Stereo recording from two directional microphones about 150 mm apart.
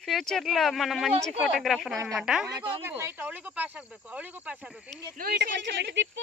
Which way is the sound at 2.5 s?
35° right (ahead or behind).